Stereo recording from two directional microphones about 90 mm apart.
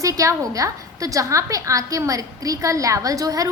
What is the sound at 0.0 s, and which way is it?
A woman's voice, 40° right (ahead or behind).